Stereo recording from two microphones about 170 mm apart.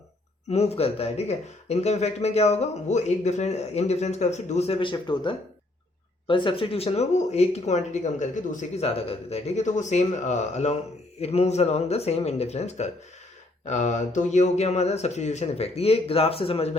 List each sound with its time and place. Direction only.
0.5 s speech: 40° left (ahead or behind)